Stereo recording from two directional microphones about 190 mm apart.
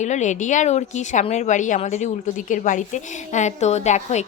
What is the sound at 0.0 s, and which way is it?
A woman's voice, 40° left (ahead or behind).